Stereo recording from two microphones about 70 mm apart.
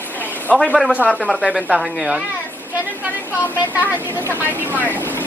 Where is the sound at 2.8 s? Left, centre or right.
Right.